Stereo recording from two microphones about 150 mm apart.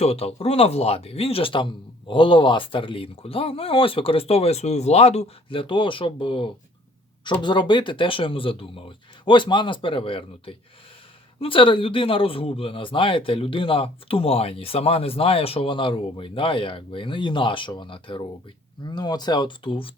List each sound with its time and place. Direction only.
0.0 s a man's voice: 45° left (ahead or behind)